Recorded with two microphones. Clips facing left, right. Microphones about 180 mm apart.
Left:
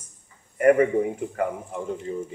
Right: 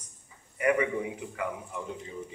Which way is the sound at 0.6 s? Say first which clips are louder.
Left 9 dB; 45° left (ahead or behind).